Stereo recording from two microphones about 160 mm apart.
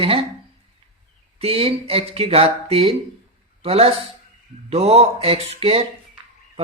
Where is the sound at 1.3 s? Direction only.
40° right (ahead or behind).